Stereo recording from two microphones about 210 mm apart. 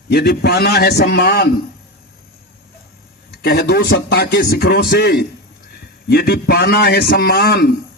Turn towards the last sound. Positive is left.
turn(degrees=45)  # may be behind; listen again after turning